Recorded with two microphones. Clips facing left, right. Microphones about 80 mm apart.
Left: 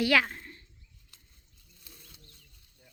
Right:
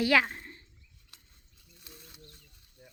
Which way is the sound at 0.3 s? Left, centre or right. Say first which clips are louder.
Even; right.